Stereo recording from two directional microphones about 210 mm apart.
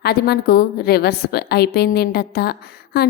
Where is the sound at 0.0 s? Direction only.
50° left (ahead or behind).